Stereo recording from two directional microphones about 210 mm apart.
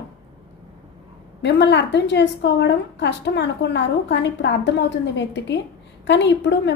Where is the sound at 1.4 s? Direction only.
55° left (ahead or behind).